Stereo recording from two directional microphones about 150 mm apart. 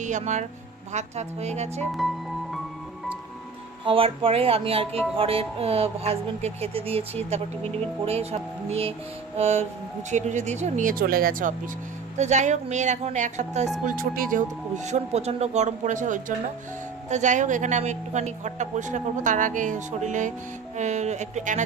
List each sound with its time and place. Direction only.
0.0 s a woman's voice: 55° right (ahead or behind)
1.9 s music: centre (ahead or behind)
3.8 s a woman's voice: 35° right (ahead or behind); by 11.5 s 65° right (ahead or behind)
12.1 s a woman's voice: 50° right (ahead or behind)
13.8 s music: 70° right (ahead or behind)
14.8 s a woman's voice: 50° right (ahead or behind)